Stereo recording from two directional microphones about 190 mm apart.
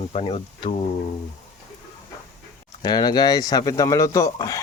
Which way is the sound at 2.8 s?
20° left (ahead or behind).